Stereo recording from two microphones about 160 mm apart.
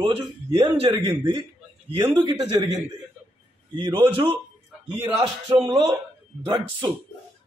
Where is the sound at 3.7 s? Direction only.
30° right (ahead or behind).